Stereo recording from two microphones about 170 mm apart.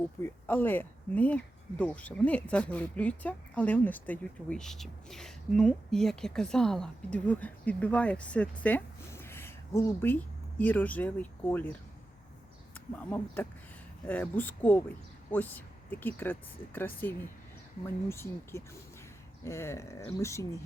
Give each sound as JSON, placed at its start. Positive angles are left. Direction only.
{"t": 0.2, "sound": "speech", "side_deg": 10}